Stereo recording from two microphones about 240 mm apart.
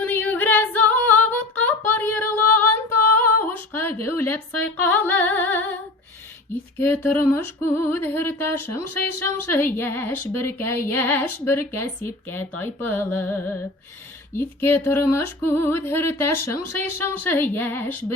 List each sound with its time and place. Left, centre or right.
0.0 s female singing: centre
3.1 s female singing: left
3.4 s a sound: centre
4.0 s female singing: centre
6.7 s female singing: centre